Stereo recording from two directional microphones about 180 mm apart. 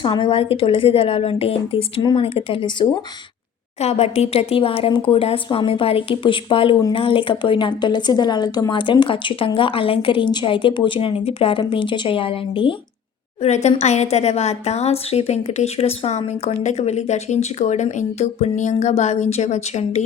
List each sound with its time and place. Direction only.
0.0 s a woman's voice: 25° left (ahead or behind)